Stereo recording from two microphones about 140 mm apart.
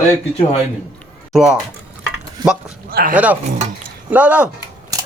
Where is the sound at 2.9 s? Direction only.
90° right.